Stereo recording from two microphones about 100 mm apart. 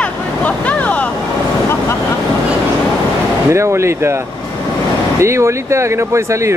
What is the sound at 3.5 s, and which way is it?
Speech, 30° right (ahead or behind).